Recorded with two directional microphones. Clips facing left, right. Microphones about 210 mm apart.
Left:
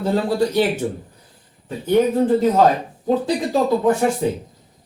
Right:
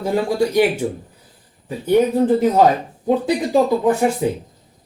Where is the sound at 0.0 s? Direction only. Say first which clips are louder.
Even; 10° right (ahead or behind).